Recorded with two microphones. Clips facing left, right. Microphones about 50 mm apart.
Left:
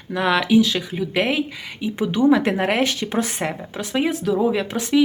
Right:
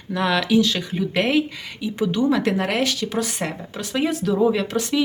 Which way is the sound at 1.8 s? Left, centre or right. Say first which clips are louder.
Left 2 dB; left.